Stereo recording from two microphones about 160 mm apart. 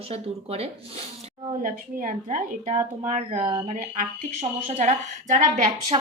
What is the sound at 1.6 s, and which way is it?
Speech, 55° right (ahead or behind).